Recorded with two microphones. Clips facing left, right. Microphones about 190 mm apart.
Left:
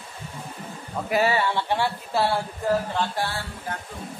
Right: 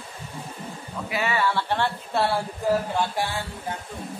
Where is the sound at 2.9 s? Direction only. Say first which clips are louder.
Right 1 dB; 10° right (ahead or behind).